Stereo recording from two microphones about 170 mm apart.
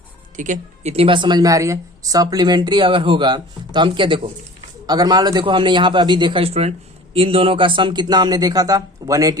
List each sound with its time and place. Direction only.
0.3 s a man's voice: 50° right (ahead or behind); by 9.4 s 20° right (ahead or behind)